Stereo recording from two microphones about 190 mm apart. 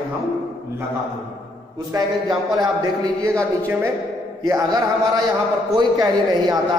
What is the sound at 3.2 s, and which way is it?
A man's voice, 15° right (ahead or behind).